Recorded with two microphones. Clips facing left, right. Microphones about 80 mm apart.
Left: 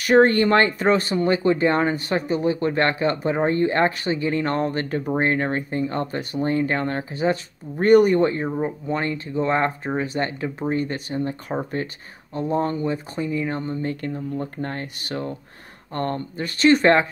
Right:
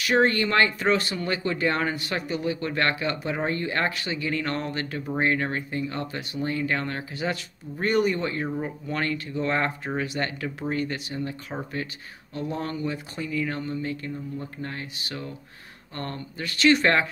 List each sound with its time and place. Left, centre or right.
0.0 s speech: left
7.8 s speech: left
8.3 s speech: left
14.0 s speech: left
14.6 s speech: left